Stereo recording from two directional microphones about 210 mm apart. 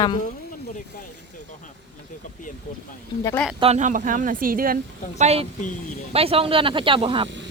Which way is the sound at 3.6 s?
30° right (ahead or behind).